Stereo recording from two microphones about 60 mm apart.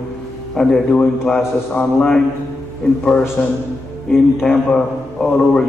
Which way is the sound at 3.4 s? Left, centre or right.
Left.